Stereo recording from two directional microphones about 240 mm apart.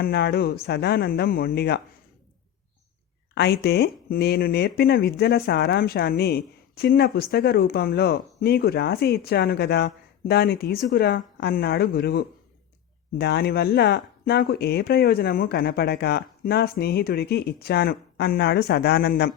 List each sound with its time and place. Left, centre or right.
0.0 s speech: left
3.3 s speech: left